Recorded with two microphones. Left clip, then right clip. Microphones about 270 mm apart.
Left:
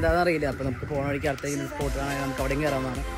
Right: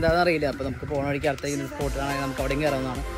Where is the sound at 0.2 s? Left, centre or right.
Centre.